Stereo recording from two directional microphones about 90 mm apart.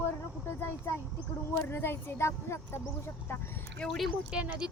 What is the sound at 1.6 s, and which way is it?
Speech, 25° left (ahead or behind).